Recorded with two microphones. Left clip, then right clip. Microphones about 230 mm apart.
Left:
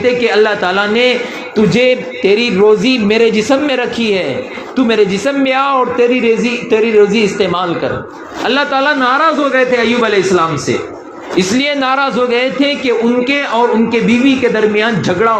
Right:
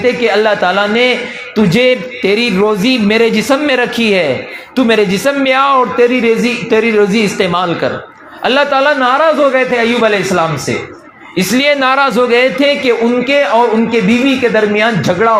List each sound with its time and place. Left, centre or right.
0.0 s a man's voice: right